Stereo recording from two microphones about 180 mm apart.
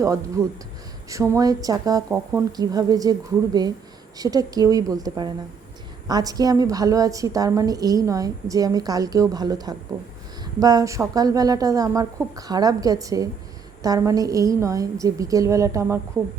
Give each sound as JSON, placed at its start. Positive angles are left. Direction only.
{"t": 0.0, "sound": "a woman's voice", "side_deg": -15}